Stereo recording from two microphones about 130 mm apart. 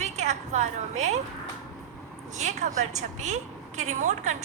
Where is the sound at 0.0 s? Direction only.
60° right (ahead or behind).